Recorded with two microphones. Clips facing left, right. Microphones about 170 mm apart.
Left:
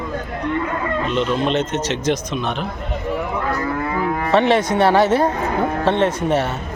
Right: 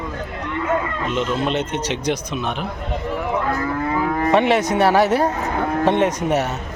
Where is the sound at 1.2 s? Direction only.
10° right (ahead or behind).